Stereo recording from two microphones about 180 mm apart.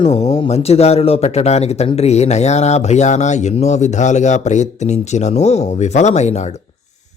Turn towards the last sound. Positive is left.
turn(degrees=40)  # may be behind; listen again after turning